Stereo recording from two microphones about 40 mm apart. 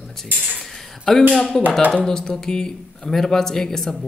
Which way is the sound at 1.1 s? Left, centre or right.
Centre.